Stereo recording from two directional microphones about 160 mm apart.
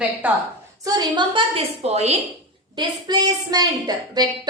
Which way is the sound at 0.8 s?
25° right (ahead or behind).